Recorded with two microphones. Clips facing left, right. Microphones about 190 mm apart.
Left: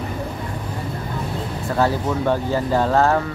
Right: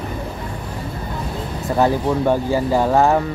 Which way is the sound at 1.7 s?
15° right (ahead or behind).